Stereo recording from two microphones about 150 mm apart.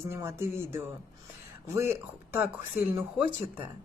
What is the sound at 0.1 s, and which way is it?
Speech, 20° right (ahead or behind).